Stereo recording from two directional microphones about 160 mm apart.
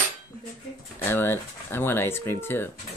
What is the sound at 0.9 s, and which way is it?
Speech, 15° left (ahead or behind).